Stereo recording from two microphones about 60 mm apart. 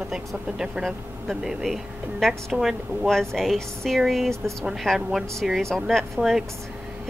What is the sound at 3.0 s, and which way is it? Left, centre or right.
Speech, centre.